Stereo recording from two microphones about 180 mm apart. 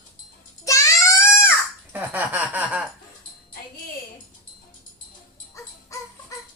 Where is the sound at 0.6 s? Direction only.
15° left (ahead or behind).